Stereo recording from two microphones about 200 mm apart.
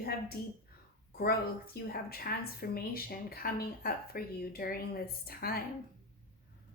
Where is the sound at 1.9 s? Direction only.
50° left (ahead or behind).